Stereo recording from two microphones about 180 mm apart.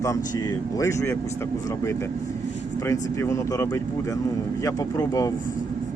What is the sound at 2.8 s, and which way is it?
Speech, 15° left (ahead or behind).